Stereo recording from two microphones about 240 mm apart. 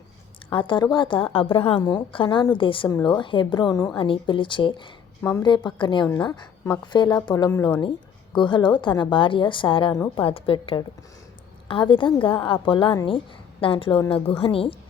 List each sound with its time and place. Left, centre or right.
0.5 s a woman's voice: centre